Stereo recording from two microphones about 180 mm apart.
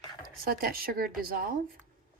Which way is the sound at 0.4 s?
55° right (ahead or behind).